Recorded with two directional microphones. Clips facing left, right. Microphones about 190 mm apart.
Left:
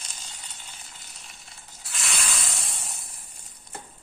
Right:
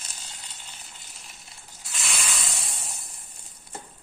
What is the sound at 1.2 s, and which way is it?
Snake, centre (ahead or behind).